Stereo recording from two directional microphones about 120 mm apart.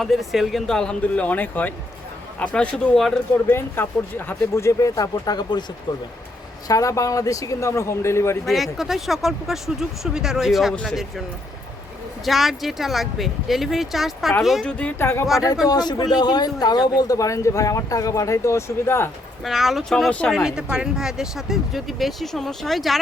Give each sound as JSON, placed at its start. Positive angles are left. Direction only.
{"t": 0.0, "sound": "speech", "side_deg": 0}
{"t": 3.8, "sound": "a man's voice", "side_deg": 20}
{"t": 6.7, "sound": "a man's voice", "side_deg": 30}
{"t": 8.4, "sound": "speech", "side_deg": 0}
{"t": 12.2, "sound": "speech", "side_deg": 0}
{"t": 14.7, "sound": "speech", "side_deg": 10}
{"t": 15.7, "sound": "a man's voice", "side_deg": 35}
{"t": 19.5, "sound": "speech", "side_deg": 0}
{"t": 20.1, "sound": "speech", "side_deg": 10}
{"t": 20.3, "sound": "speech", "side_deg": -5}